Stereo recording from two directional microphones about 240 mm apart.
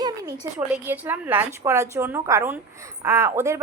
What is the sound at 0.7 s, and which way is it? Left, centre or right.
Speech, centre.